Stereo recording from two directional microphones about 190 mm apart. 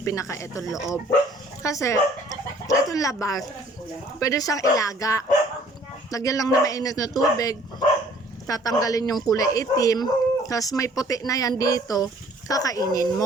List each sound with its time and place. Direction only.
0.0 s speech: 15° left (ahead or behind)
0.7 s speech: centre (ahead or behind)
1.6 s speech: 15° left (ahead or behind)